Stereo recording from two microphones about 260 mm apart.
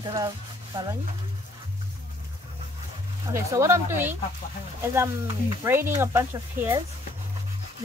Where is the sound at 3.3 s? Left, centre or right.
Centre.